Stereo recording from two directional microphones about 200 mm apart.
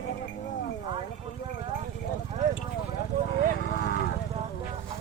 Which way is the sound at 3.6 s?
50° left (ahead or behind).